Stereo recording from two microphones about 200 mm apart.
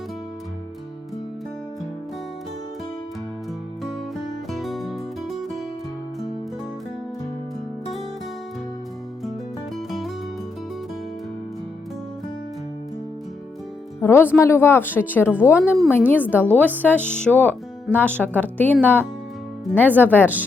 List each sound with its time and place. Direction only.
3.8 s music: centre (ahead or behind)
9.7 s music: centre (ahead or behind)
14.0 s speech: 10° left (ahead or behind)